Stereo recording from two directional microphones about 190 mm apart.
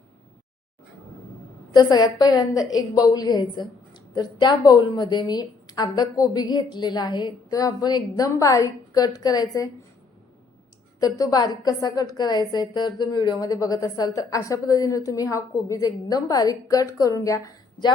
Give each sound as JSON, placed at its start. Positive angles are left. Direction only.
{"t": 1.7, "sound": "a woman's voice", "side_deg": 20}
{"t": 11.0, "sound": "a woman's voice", "side_deg": 20}